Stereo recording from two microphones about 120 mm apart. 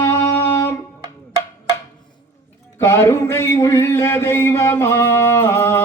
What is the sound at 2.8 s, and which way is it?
A man's voice, 20° left (ahead or behind).